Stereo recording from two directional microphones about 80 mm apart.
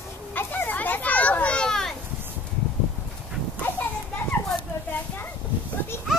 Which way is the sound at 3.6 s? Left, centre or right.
Left.